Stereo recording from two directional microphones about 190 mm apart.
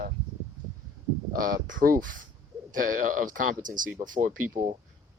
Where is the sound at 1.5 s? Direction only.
45° right (ahead or behind).